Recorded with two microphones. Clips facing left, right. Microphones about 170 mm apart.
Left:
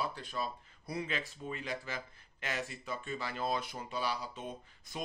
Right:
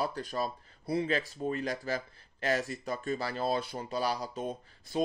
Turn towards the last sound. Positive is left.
turn(degrees=-35)  # may be behind; listen again after turning